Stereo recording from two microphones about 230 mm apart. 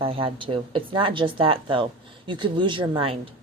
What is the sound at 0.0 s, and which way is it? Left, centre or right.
Speech, right.